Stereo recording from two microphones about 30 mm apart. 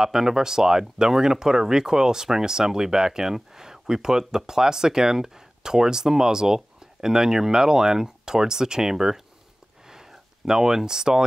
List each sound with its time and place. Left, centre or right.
0.0 s speech: centre
9.8 s a sound: centre
10.9 s speech: right